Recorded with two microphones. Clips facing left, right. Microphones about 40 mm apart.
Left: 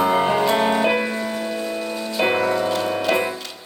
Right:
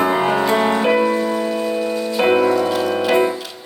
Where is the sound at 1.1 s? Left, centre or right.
Centre.